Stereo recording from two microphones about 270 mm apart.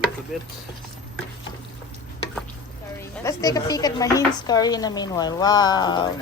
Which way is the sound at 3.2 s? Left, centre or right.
Centre.